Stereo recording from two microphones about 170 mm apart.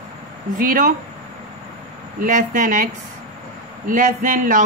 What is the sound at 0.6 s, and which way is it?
Speech, 55° right (ahead or behind).